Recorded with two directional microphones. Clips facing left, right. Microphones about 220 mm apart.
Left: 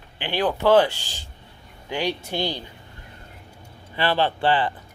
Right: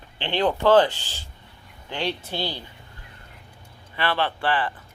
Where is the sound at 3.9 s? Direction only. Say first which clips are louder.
Left 3 dB; 35° left (ahead or behind).